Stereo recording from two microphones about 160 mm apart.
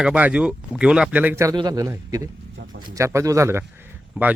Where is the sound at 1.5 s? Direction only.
25° right (ahead or behind); by 4.3 s 10° right (ahead or behind).